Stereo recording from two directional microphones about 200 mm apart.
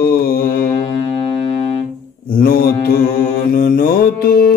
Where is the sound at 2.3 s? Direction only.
50° left (ahead or behind).